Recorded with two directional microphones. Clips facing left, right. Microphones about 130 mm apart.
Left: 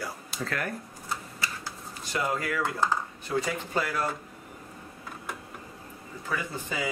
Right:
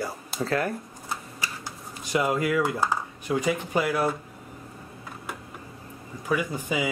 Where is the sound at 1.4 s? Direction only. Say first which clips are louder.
Even; 15° right (ahead or behind).